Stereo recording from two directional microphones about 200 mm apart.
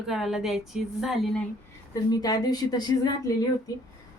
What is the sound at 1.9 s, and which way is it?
Speech, 20° left (ahead or behind).